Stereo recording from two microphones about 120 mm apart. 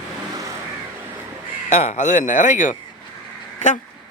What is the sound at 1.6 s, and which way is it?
Speech, 75° left (ahead or behind).